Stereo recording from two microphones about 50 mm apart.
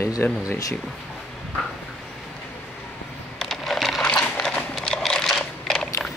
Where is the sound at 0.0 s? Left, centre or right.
Left.